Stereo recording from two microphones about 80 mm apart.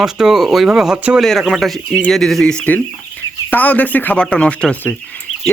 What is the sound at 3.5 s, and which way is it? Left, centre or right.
Speech, centre.